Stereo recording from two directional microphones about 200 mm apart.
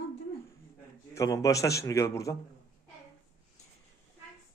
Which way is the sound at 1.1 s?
15° left (ahead or behind).